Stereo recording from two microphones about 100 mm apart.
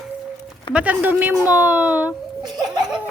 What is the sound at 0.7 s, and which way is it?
Speech, 15° right (ahead or behind).